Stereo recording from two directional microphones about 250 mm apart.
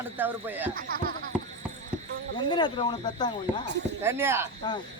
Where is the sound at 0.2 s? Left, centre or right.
Centre.